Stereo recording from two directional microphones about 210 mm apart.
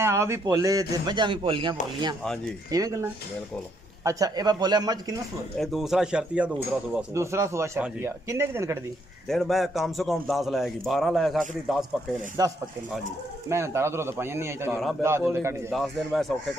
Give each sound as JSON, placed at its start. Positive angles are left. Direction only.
{"t": 0.0, "sound": "a man's voice", "side_deg": -15}
{"t": 5.6, "sound": "speech", "side_deg": 0}
{"t": 9.3, "sound": "a man's voice", "side_deg": 0}
{"t": 12.4, "sound": "speech", "side_deg": -20}
{"t": 14.7, "sound": "a man's voice", "side_deg": 0}
{"t": 15.0, "sound": "speech", "side_deg": -10}
{"t": 15.7, "sound": "a man's voice", "side_deg": 0}